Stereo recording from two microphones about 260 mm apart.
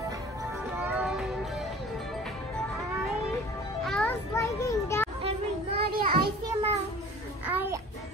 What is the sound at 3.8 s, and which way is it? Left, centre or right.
Children playing, centre.